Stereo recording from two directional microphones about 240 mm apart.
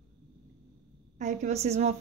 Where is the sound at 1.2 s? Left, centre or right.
Right.